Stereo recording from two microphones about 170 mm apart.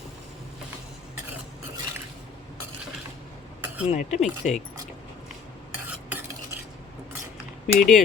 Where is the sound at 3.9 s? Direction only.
45° left (ahead or behind).